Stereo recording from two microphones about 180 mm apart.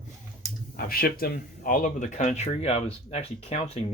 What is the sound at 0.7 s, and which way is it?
Speech, 55° left (ahead or behind).